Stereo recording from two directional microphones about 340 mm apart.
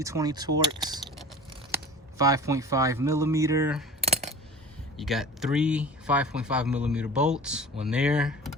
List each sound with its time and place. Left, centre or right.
0.0 s speech: centre
2.1 s speech: centre
4.0 s coin: centre
4.9 s speech: centre